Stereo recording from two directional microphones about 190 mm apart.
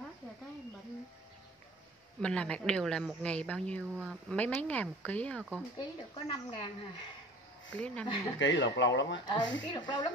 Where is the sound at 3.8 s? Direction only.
10° right (ahead or behind).